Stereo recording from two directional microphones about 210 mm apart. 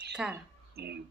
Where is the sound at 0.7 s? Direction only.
50° right (ahead or behind).